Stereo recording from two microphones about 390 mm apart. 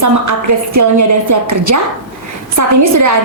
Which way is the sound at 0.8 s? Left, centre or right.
Right.